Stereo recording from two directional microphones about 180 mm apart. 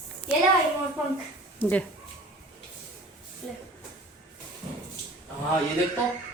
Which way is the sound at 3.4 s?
5° left (ahead or behind).